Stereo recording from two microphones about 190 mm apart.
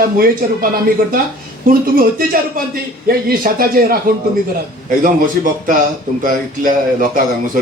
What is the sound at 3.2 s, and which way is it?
Speech, 50° right (ahead or behind).